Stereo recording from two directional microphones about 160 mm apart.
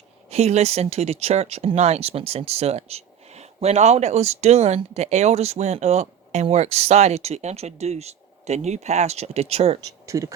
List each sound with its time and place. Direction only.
0.3 s speech: 40° right (ahead or behind)
10.1 s speech: 20° right (ahead or behind)